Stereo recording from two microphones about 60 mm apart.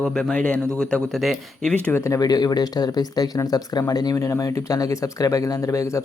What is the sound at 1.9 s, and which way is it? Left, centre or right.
Speech, left.